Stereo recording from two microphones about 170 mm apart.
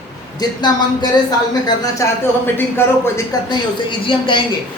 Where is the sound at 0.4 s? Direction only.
25° left (ahead or behind).